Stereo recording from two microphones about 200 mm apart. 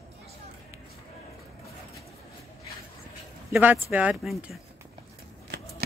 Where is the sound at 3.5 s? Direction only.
10° right (ahead or behind).